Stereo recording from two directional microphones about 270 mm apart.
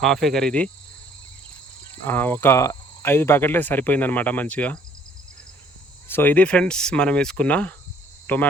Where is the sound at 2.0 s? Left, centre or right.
Centre.